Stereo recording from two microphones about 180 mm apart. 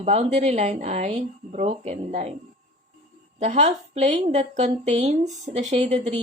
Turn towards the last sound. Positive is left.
turn(degrees=-40)  # may be behind; listen again after turning